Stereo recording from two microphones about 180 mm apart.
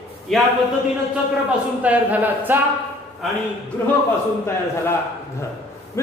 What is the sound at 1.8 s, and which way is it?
Speech, 10° right (ahead or behind).